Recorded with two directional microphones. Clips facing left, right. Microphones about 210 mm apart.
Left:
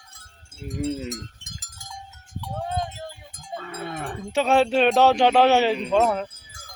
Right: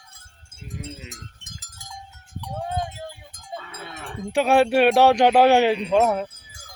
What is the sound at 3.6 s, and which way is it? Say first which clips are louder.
Livestock: left 6 dB; 55° left (ahead or behind).